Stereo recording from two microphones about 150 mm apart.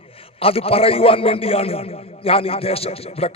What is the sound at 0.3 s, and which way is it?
A man's voice, 40° left (ahead or behind).